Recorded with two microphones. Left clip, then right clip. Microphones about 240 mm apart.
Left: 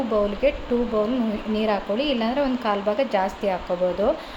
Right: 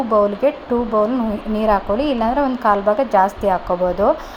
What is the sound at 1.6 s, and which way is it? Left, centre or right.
A woman's voice, centre.